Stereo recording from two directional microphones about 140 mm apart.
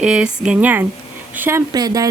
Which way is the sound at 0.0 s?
5° right (ahead or behind).